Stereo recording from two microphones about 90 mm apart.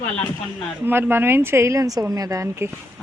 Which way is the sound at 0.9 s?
25° right (ahead or behind).